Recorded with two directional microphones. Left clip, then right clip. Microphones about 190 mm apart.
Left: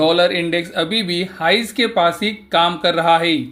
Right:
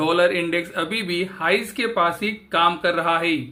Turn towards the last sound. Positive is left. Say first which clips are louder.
# left 6 dB
turn(degrees=20)  # may be behind; listen again after turning